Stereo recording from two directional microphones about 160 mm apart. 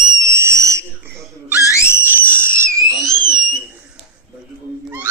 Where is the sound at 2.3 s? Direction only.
15° right (ahead or behind).